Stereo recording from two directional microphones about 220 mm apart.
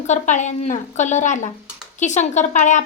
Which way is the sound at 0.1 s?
35° left (ahead or behind).